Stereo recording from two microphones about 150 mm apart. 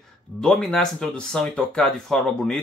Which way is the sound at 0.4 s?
5° left (ahead or behind).